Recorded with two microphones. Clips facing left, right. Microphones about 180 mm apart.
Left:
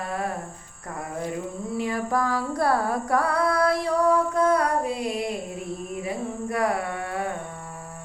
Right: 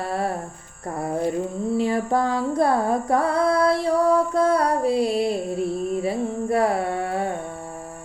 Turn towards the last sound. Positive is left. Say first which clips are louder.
# right 5 dB
turn(degrees=-30)  # may be behind; listen again after turning